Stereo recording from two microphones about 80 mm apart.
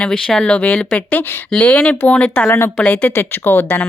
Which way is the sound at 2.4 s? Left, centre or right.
Left.